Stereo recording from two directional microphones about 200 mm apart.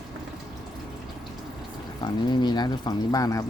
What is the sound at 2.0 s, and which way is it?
Speech, 20° left (ahead or behind).